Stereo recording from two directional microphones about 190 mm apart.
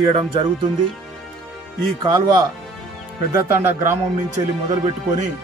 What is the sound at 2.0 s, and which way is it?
Speech, 20° right (ahead or behind).